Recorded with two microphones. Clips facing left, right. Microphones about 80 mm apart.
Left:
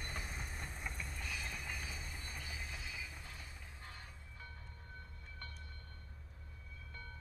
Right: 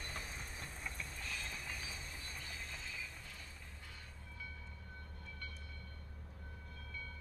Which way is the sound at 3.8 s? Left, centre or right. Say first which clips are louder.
Left 1 dB; left.